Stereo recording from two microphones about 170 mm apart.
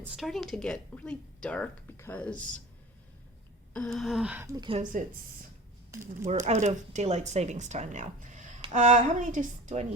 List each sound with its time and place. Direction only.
0.0 s a woman's voice: 5° right (ahead or behind)
3.8 s gasp: 5° left (ahead or behind)
4.5 s speech: 25° right (ahead or behind)
6.4 s speech: 40° right (ahead or behind)